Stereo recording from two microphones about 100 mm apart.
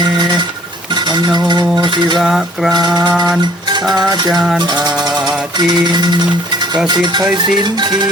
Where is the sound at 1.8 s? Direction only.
45° right (ahead or behind).